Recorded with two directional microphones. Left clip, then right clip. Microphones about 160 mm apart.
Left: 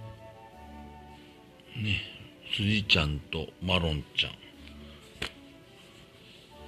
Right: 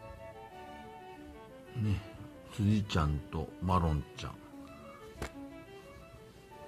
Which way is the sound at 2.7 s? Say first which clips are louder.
Left 9 dB; 10° right (ahead or behind).